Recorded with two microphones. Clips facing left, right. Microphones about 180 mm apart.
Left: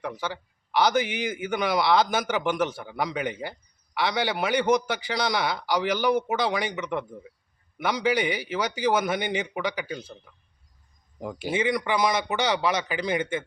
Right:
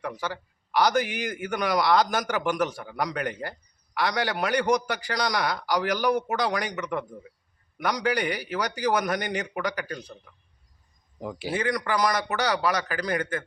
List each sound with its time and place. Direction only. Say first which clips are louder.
0.0 s a man's voice: even; centre (ahead or behind)
11.2 s a man's voice: left 2 dB; centre (ahead or behind)
12.4 s speech: even; 25° left (ahead or behind)